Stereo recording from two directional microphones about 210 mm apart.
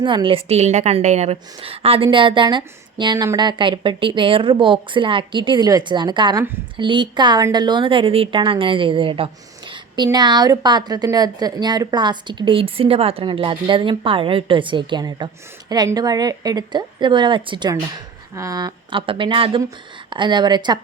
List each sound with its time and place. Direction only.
0.0 s a woman's voice: 25° right (ahead or behind)